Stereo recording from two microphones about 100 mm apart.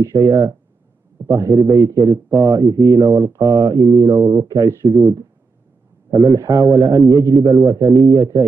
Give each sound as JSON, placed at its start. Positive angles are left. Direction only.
{"t": 0.0, "sound": "a man's voice", "side_deg": -35}